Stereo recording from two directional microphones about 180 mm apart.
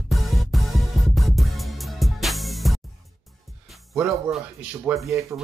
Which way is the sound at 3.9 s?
5° right (ahead or behind).